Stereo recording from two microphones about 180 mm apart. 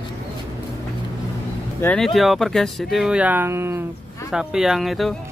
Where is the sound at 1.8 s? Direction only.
5° left (ahead or behind).